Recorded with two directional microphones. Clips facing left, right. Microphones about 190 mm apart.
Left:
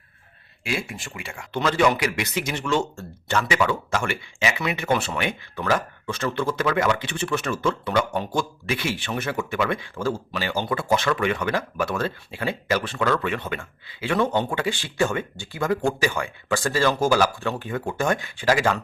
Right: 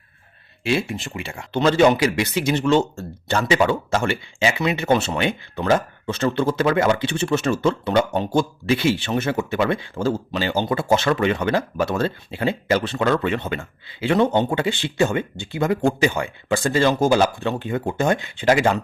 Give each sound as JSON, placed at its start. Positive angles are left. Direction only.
{"t": 0.6, "sound": "speech", "side_deg": -25}